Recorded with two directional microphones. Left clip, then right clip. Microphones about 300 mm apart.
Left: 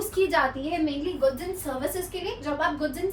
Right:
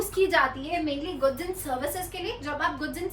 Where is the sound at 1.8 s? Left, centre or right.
Centre.